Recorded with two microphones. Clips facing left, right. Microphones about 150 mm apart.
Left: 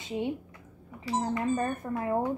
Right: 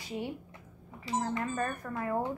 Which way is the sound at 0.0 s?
20° left (ahead or behind).